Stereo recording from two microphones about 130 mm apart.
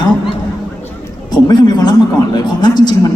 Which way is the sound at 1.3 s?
30° left (ahead or behind).